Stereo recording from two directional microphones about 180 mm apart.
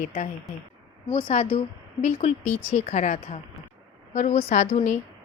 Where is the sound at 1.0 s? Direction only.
30° left (ahead or behind).